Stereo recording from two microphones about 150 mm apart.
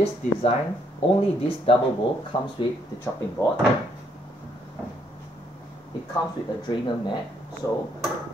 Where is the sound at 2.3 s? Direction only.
35° left (ahead or behind).